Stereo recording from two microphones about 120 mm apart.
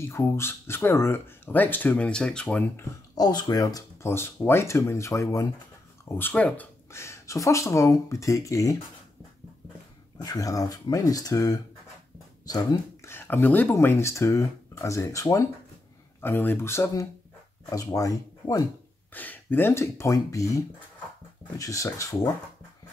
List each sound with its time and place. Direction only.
0.1 s speech: 20° left (ahead or behind); by 2.6 s 5° left (ahead or behind)
2.8 s speech: 35° left (ahead or behind)
6.1 s speech: 15° left (ahead or behind)
10.2 s speech: 30° left (ahead or behind)
19.1 s speech: 15° left (ahead or behind)